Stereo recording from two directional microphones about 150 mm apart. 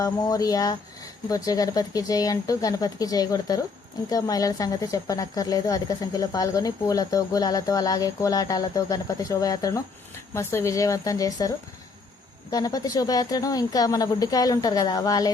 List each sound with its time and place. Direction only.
0.0 s speech: 25° left (ahead or behind)